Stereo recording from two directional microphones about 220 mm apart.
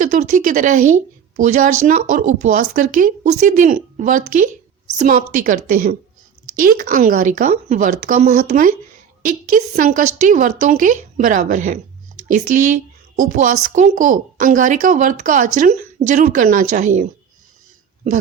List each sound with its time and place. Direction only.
0.0 s a woman's voice: 35° right (ahead or behind)